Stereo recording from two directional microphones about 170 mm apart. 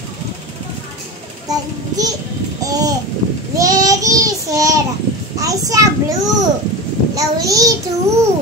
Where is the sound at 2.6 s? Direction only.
20° right (ahead or behind).